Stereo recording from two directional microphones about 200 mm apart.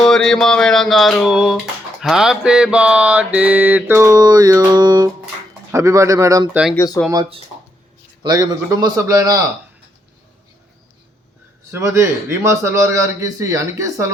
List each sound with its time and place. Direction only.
0.0 s music: 5° left (ahead or behind); by 5.1 s 20° right (ahead or behind)
5.7 s a man's voice: 15° right (ahead or behind)
6.7 s speech: 15° left (ahead or behind)
7.1 s a man's voice: 20° right (ahead or behind)
11.7 s a man's voice: 15° right (ahead or behind)